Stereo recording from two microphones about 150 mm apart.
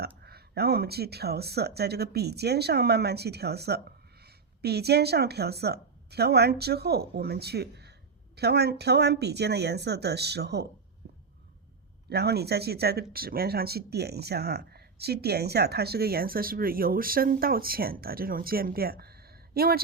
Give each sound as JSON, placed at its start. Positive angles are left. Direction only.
{"t": 0.3, "sound": "speech", "side_deg": -90}
{"t": 12.0, "sound": "speech", "side_deg": -90}